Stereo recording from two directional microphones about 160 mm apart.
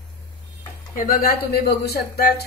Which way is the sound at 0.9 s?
60° left (ahead or behind).